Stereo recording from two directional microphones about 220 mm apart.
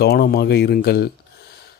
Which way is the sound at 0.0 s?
45° left (ahead or behind).